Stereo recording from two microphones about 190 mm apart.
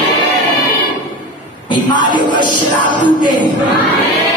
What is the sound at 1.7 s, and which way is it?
Music, 25° left (ahead or behind).